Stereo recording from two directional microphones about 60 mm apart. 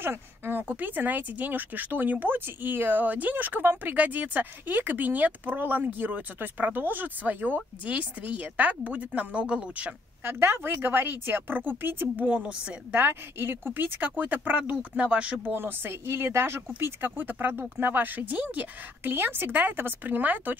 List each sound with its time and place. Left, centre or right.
0.0 s speech: right
10.2 s speech: right
12.3 s speech: centre
12.9 s speech: right